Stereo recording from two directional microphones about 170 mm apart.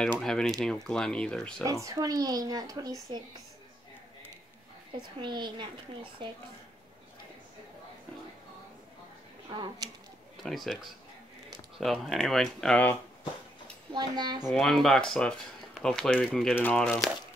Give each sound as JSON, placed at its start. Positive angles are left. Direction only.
{"t": 0.2, "sound": "speech", "side_deg": 5}
{"t": 1.6, "sound": "a child's voice", "side_deg": -20}
{"t": 5.2, "sound": "a child's voice", "side_deg": -25}
{"t": 9.5, "sound": "a child's voice", "side_deg": -25}
{"t": 10.3, "sound": "speech", "side_deg": 0}
{"t": 13.9, "sound": "a child's voice", "side_deg": -25}
{"t": 14.5, "sound": "speech", "side_deg": 0}